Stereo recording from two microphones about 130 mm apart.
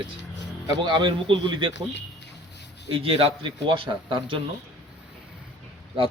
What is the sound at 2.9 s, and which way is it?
A man's voice, 45° right (ahead or behind).